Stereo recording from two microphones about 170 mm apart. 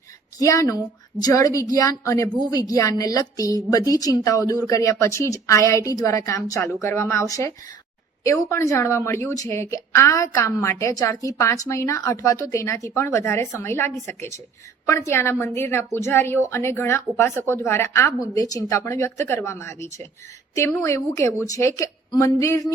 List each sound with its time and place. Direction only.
0.3 s a woman's voice: 20° left (ahead or behind)